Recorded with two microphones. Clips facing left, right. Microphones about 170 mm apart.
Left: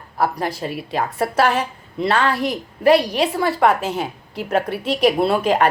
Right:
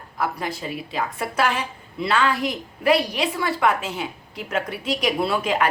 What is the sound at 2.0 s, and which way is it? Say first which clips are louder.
A woman's voice: left 3 dB; 40° left (ahead or behind).